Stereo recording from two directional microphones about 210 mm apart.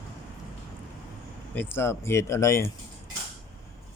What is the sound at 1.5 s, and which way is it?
A man's voice, 10° left (ahead or behind).